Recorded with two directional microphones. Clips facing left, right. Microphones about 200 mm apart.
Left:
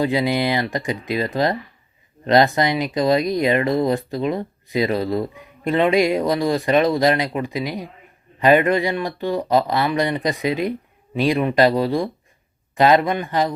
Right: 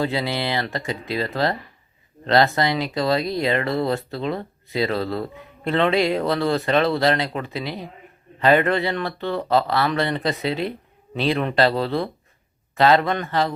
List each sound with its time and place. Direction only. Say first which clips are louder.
0.0 s speech: left 4 dB; 15° left (ahead or behind)